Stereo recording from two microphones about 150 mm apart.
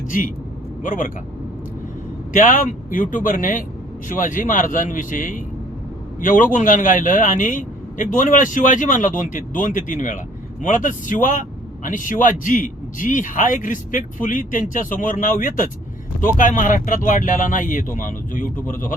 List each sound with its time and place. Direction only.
0.1 s speech: 65° left (ahead or behind)
2.3 s speech: 60° left (ahead or behind)